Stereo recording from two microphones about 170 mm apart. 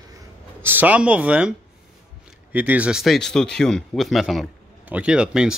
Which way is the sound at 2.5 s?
10° right (ahead or behind).